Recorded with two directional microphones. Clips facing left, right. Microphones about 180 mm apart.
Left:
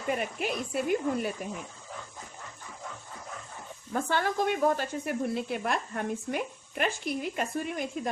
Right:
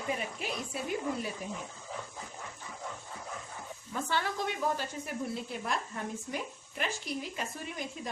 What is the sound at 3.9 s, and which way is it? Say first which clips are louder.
Speech: left 5 dB; 50° left (ahead or behind).